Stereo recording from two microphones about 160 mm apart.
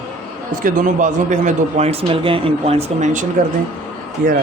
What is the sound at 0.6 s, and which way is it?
A man's voice, 55° right (ahead or behind).